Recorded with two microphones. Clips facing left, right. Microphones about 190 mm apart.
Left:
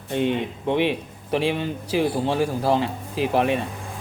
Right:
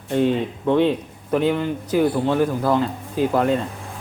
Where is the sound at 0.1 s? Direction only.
20° left (ahead or behind).